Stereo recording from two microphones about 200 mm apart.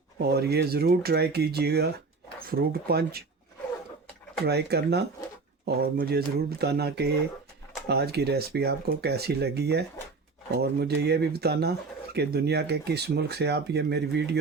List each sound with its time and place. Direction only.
0.2 s speech: 50° right (ahead or behind)
4.4 s speech: 55° right (ahead or behind)